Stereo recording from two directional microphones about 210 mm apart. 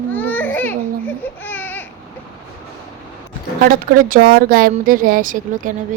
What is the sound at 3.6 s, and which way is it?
Speech, 40° right (ahead or behind).